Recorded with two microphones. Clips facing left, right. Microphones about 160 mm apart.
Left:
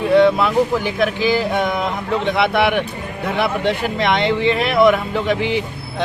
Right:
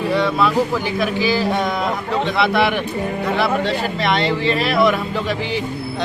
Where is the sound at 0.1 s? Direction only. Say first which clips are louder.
Left 6 dB; 20° left (ahead or behind).